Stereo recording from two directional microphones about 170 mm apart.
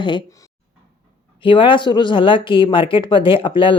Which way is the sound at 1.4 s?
30° left (ahead or behind).